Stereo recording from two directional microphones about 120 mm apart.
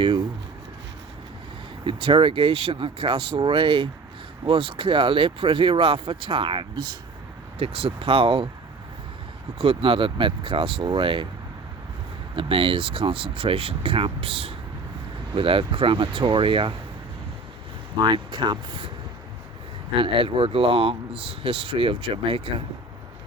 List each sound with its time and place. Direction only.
1.8 s speech: 45° right (ahead or behind)
9.6 s speech: 50° right (ahead or behind)
12.4 s speech: 45° right (ahead or behind)
18.0 s speech: 40° right (ahead or behind)
20.0 s speech: 50° right (ahead or behind)